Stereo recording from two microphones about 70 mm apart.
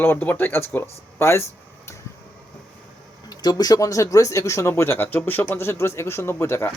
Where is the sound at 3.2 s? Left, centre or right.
Left.